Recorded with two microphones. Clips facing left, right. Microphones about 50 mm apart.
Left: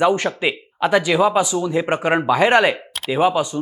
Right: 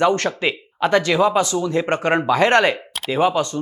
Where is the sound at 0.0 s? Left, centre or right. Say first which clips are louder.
Even; centre.